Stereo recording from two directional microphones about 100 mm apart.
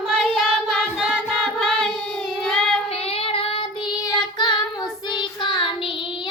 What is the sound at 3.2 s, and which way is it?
Child singing, 70° left (ahead or behind).